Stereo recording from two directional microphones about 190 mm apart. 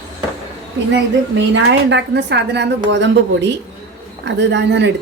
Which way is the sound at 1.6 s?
65° right (ahead or behind).